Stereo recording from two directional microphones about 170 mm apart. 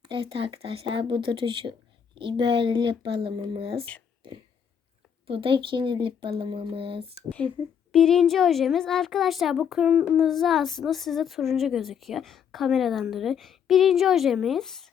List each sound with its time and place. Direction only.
0.0 s speech: 30° right (ahead or behind)
5.2 s speech: 30° right (ahead or behind)
7.9 s speech: 5° left (ahead or behind)